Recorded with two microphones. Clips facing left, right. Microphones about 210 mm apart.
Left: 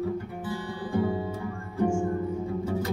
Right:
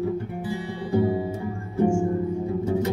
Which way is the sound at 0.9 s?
25° right (ahead or behind).